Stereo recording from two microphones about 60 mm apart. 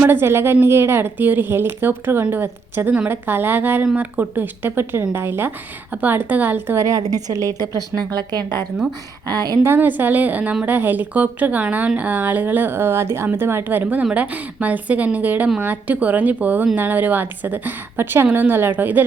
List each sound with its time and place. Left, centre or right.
0.0 s a woman's voice: right
5.9 s a woman's voice: right
6.7 s a woman's voice: right
9.3 s a woman's voice: right
9.6 s a woman's voice: right